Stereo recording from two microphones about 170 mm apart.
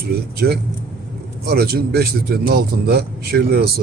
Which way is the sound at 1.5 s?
70° right (ahead or behind).